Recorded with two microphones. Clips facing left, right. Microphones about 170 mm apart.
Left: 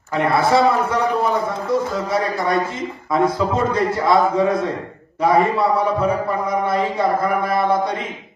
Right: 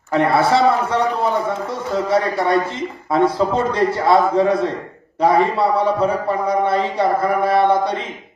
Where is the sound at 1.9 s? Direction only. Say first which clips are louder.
Right 3 dB; 30° right (ahead or behind).